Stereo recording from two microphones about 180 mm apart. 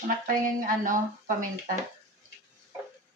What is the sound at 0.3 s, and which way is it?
A woman's voice, 50° right (ahead or behind).